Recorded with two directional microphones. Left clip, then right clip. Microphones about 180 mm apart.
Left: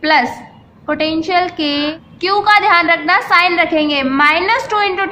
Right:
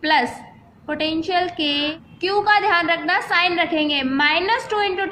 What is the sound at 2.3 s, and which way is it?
A woman's voice, 15° left (ahead or behind).